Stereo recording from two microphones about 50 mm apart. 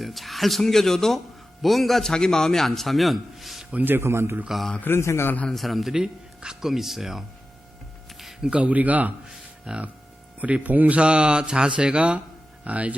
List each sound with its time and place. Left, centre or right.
0.0 s a man's voice: centre
3.8 s speech: right
4.9 s a man's voice: left
5.5 s a man's voice: centre
6.0 s speech: centre
8.2 s music: centre
8.4 s speech: right
9.7 s speech: centre
10.4 s speech: right